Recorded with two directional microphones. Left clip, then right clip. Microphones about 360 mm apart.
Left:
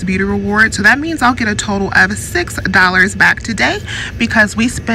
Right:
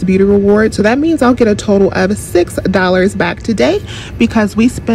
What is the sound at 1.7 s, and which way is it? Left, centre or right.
Speech, right.